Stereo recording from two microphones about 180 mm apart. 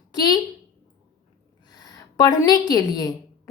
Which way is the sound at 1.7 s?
20° left (ahead or behind).